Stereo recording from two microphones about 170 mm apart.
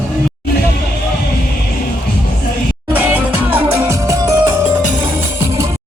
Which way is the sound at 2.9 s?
10° right (ahead or behind).